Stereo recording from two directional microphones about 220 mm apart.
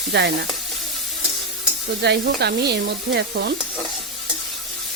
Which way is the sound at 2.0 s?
50° right (ahead or behind).